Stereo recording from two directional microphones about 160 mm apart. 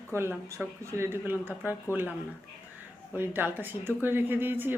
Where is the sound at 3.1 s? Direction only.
15° right (ahead or behind).